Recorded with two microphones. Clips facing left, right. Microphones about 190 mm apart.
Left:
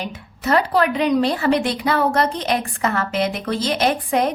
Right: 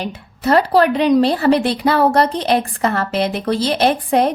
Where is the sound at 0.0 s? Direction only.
35° right (ahead or behind).